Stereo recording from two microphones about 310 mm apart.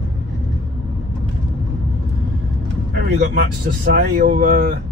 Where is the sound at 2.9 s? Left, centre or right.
Right.